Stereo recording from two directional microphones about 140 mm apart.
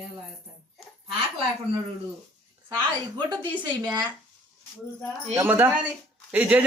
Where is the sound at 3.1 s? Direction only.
30° right (ahead or behind).